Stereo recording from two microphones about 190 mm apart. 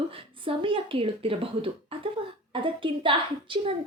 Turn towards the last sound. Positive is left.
turn(degrees=-25)  # may be behind; listen again after turning